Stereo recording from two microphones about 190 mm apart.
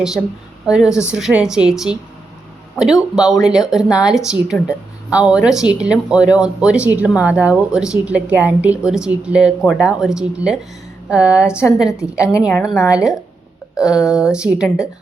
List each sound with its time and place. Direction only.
0.2 s a woman's voice: 5° left (ahead or behind)
0.7 s a woman's voice: 5° right (ahead or behind)
11.9 s a woman's voice: 15° left (ahead or behind)
12.4 s a woman's voice: centre (ahead or behind)